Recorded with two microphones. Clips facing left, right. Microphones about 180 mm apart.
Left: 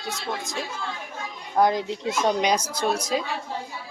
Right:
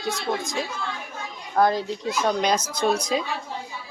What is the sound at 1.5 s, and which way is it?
A child's voice, 20° left (ahead or behind).